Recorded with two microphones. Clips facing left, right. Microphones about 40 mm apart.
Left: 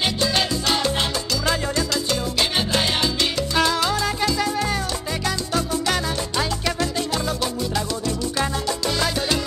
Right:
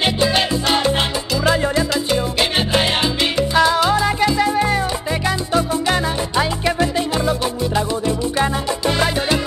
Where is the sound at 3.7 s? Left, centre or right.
Right.